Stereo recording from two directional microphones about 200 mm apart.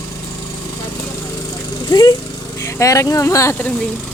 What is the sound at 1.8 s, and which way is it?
Speech, 20° left (ahead or behind).